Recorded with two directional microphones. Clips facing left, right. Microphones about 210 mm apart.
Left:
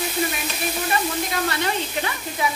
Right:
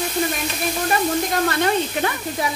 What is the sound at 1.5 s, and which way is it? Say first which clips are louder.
Speech: right 5 dB; 55° right (ahead or behind).